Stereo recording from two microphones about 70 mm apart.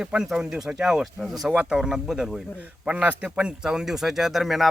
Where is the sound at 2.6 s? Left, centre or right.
Centre.